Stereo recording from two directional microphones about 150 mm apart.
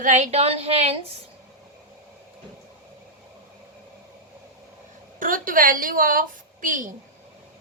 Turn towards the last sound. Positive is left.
turn(degrees=-60)  # may be behind; listen again after turning